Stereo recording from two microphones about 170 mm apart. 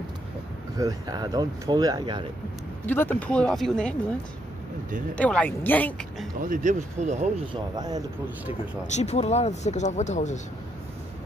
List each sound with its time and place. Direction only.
0.7 s speech: 20° right (ahead or behind)
2.9 s speech: 10° left (ahead or behind)
5.1 s speech: 5° left (ahead or behind)
6.4 s speech: 50° right (ahead or behind)
7.7 s speech: 25° right (ahead or behind)
8.8 s speech: 40° left (ahead or behind)